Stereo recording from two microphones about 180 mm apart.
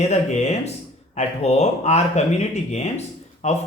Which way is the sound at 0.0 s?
40° left (ahead or behind).